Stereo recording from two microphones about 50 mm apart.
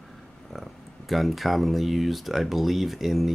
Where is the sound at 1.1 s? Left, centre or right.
Centre.